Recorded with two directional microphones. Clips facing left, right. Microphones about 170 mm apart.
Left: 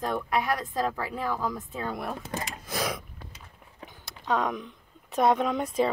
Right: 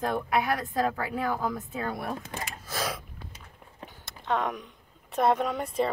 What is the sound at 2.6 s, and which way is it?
Gasp, 15° left (ahead or behind).